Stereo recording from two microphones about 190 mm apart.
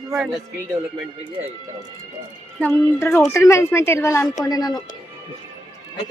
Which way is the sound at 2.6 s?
15° left (ahead or behind).